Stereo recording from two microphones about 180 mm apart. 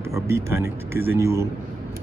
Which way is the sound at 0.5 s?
15° right (ahead or behind).